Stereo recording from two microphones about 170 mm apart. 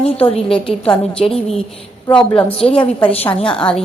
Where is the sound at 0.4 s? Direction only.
5° left (ahead or behind).